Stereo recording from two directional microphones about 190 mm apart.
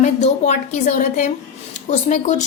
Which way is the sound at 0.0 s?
35° left (ahead or behind).